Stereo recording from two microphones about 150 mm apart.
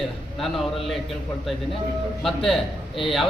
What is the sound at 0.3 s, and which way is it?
Speech, centre (ahead or behind).